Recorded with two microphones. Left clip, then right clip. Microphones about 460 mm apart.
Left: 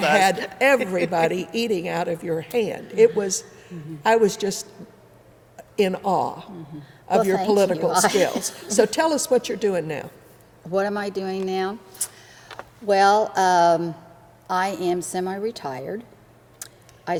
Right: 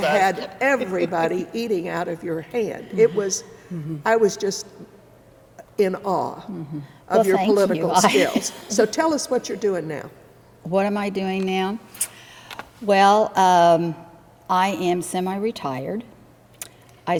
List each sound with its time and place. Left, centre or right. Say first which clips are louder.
0.0 s a man's voice: left 1 dB; left
10.7 s a woman's voice: right 2 dB; right